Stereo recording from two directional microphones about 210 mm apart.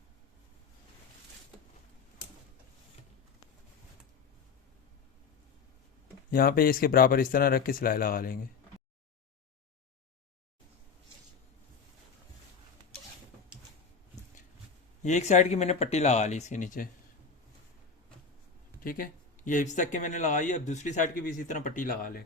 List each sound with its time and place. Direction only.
6.3 s speech: 45° left (ahead or behind)
15.0 s speech: 35° left (ahead or behind)
18.8 s speech: 40° left (ahead or behind)